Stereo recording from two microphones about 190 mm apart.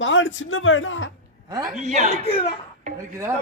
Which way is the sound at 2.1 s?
30° left (ahead or behind).